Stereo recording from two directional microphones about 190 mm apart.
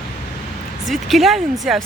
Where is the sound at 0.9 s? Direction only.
Centre (ahead or behind).